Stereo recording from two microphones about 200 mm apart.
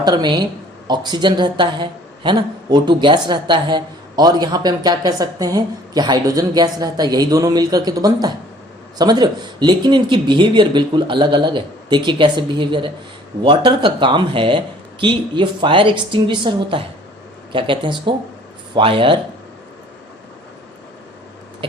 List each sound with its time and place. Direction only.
0.0 s speech: 20° right (ahead or behind)